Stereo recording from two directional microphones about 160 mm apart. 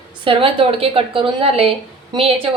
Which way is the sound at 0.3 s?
35° right (ahead or behind).